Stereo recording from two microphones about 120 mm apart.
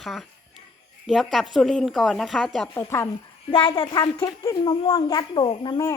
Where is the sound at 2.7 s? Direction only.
20° left (ahead or behind).